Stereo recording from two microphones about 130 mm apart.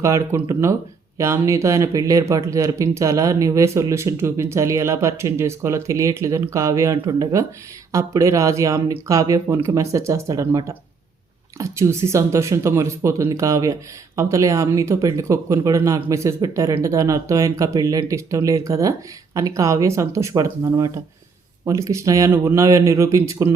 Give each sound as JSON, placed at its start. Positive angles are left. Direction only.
{"t": 0.0, "sound": "speech", "side_deg": -20}